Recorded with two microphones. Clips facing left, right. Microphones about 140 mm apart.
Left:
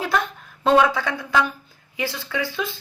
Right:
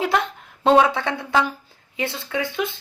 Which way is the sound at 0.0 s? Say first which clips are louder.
Right 2 dB; 25° right (ahead or behind).